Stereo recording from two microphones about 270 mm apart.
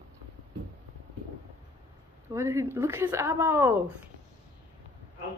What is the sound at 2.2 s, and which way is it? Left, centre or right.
A woman's voice, centre.